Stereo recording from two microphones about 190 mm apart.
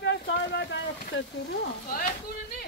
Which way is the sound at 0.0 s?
65° left (ahead or behind).